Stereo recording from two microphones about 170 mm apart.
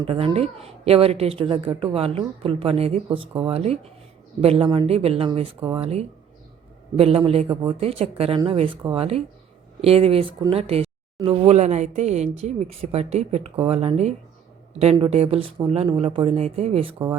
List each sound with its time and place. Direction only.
0.1 s a woman's voice: 35° right (ahead or behind)
7.2 s a woman's voice: 35° right (ahead or behind)